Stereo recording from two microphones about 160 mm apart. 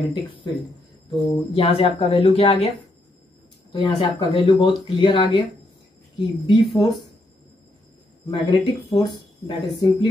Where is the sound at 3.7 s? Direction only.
30° left (ahead or behind).